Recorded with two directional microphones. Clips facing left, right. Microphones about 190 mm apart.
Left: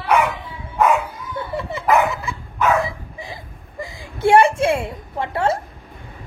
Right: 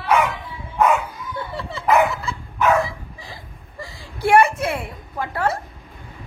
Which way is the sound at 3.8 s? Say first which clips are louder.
Left 4 dB; 20° left (ahead or behind).